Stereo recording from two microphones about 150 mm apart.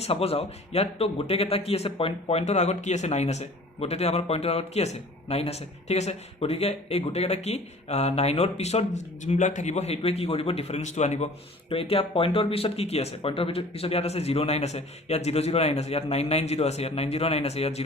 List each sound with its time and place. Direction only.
0.0 s a man's voice: 40° left (ahead or behind)
11.7 s a man's voice: 40° left (ahead or behind)